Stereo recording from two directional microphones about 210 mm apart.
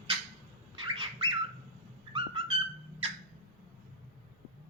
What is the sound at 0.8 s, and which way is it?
Bird, 25° right (ahead or behind).